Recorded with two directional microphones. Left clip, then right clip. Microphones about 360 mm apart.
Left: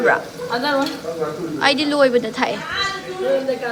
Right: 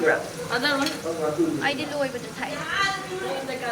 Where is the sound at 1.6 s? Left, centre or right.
Centre.